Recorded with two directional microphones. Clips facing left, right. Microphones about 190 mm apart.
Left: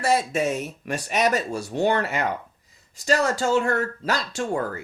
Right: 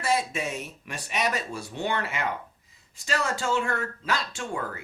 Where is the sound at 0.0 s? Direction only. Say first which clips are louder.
Left 5 dB; 40° left (ahead or behind).